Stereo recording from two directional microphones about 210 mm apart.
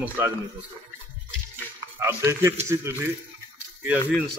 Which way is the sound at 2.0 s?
10° right (ahead or behind).